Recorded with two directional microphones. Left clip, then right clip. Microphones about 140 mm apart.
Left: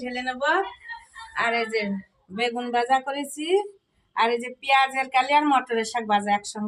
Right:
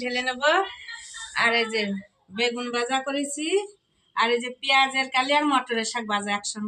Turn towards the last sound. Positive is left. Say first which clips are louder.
# left 4 dB
turn(degrees=30)  # may be behind; listen again after turning